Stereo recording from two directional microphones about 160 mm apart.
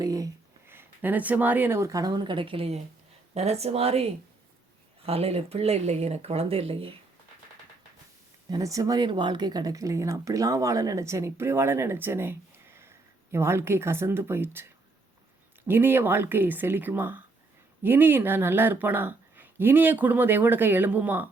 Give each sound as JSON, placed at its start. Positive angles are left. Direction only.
{"t": 0.0, "sound": "a sound", "side_deg": -25}
{"t": 0.7, "sound": "speech", "side_deg": -10}
{"t": 8.4, "sound": "speech", "side_deg": -20}